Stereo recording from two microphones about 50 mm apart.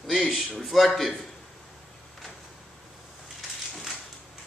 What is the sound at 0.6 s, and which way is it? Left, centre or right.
Speech, centre.